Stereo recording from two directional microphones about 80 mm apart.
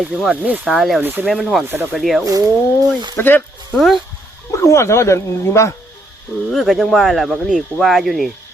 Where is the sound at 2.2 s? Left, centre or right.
Right.